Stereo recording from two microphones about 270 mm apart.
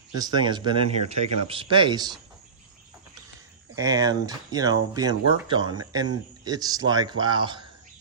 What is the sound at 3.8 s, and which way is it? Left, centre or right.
Speech, centre.